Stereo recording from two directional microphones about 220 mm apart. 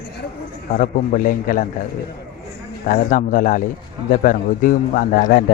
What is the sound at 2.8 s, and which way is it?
Speech, 40° left (ahead or behind).